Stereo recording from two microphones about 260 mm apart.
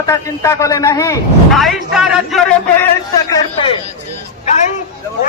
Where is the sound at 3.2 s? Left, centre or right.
Centre.